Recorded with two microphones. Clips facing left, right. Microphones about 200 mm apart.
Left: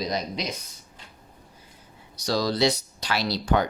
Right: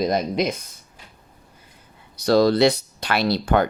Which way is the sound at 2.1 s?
60° right (ahead or behind).